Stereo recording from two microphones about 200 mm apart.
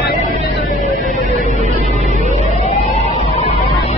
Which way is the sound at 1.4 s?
35° left (ahead or behind).